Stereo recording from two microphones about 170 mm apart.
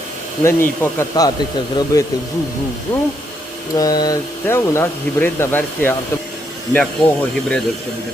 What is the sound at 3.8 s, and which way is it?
Speech, 20° left (ahead or behind).